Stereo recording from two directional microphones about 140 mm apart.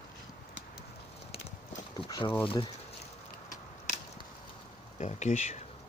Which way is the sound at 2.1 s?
30° left (ahead or behind).